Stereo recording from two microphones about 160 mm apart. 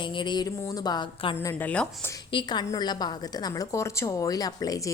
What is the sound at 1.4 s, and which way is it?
Speech, 20° left (ahead or behind).